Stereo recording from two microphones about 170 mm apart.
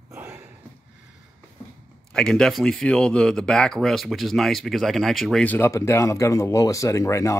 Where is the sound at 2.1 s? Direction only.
5° left (ahead or behind).